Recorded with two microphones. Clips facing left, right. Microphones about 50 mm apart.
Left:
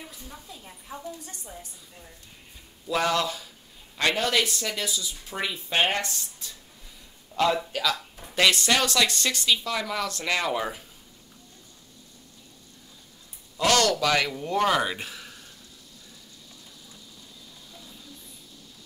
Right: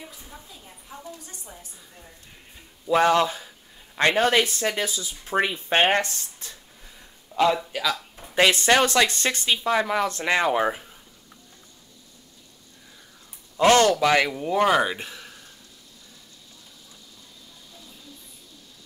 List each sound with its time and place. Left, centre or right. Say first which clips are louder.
0.1 s a woman's voice: even; centre
2.9 s speech: right 6 dB; right
7.3 s a man's voice: right 3 dB; centre
8.4 s speech: right 4 dB; right
13.6 s speech: right 5 dB; right
14.3 s speech: right 3 dB; centre